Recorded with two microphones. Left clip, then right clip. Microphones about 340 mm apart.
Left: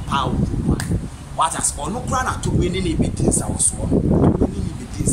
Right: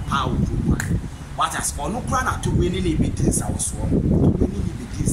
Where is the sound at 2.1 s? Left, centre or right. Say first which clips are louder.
Left 1 dB; centre.